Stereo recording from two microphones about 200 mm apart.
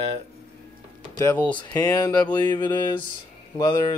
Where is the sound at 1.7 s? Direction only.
15° left (ahead or behind).